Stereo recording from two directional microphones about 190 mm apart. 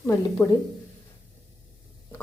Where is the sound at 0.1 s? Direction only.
15° left (ahead or behind).